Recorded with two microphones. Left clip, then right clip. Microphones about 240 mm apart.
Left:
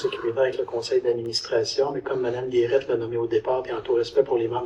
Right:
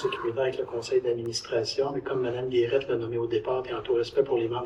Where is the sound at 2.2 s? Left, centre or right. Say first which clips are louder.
Left 2 dB; centre.